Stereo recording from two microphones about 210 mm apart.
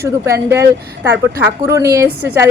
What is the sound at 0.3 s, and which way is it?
A woman's voice, 15° right (ahead or behind).